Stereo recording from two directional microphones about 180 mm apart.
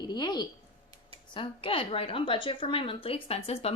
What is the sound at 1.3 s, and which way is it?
A woman's voice, 30° left (ahead or behind).